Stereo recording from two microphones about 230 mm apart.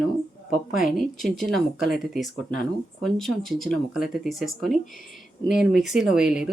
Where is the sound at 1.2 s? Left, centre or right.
Centre.